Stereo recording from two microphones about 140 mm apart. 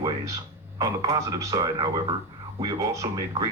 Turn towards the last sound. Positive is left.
turn(degrees=-20)  # may be behind; listen again after turning